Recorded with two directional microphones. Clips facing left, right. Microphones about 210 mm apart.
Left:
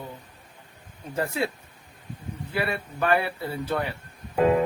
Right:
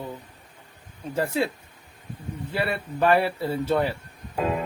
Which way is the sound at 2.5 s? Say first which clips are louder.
Right 2 dB; 30° right (ahead or behind).